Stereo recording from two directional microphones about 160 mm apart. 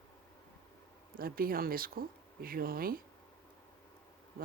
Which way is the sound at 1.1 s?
65° right (ahead or behind).